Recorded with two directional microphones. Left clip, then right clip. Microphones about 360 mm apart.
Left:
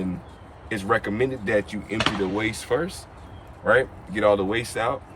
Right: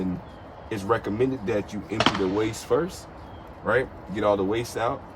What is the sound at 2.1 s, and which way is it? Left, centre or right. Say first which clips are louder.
Speech: right 2 dB; right.